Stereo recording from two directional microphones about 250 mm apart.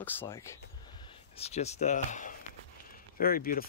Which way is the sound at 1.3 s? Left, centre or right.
Left.